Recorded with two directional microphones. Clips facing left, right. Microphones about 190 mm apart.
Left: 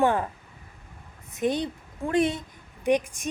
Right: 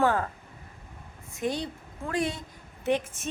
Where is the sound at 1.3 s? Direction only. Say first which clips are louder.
Left 4 dB; 20° left (ahead or behind).